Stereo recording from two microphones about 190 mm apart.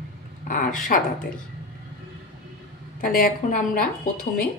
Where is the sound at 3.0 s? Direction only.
50° left (ahead or behind).